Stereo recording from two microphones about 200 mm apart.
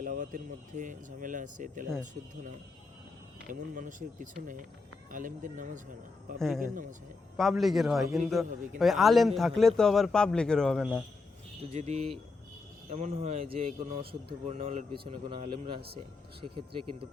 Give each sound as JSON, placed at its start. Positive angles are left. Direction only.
{"t": 0.0, "sound": "speech", "side_deg": -40}
{"t": 3.5, "sound": "speech", "side_deg": -40}
{"t": 7.3, "sound": "speech", "side_deg": 0}
{"t": 11.7, "sound": "speech", "side_deg": -35}